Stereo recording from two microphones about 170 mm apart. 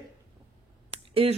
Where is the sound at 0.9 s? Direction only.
35° right (ahead or behind).